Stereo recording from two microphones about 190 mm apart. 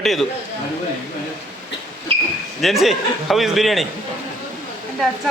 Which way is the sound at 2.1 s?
30° right (ahead or behind).